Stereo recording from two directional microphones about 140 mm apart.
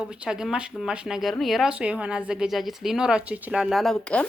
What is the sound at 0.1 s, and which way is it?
Speech, 5° right (ahead or behind).